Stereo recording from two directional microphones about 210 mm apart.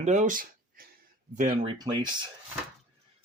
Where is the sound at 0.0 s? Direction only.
35° right (ahead or behind).